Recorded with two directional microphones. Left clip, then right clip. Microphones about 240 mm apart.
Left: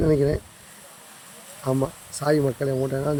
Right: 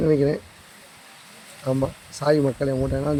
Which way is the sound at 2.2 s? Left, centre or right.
Centre.